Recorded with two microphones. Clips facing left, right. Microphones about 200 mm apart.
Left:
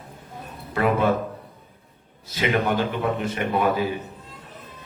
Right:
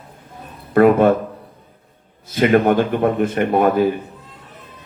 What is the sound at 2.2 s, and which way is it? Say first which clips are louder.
A man's voice: right 9 dB; 50° right (ahead or behind).